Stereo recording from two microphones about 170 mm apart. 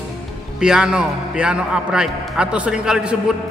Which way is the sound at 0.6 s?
5° right (ahead or behind).